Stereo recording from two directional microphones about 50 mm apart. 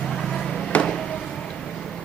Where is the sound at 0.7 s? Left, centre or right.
Left.